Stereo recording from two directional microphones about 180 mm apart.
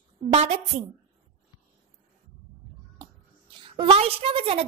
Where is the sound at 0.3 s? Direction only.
35° right (ahead or behind).